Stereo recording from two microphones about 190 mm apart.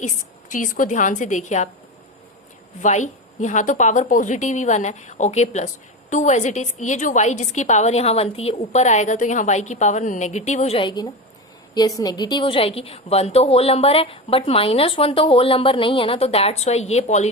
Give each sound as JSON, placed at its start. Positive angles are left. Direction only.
{"t": 0.5, "sound": "a woman's voice", "side_deg": 45}
{"t": 2.8, "sound": "a woman's voice", "side_deg": 40}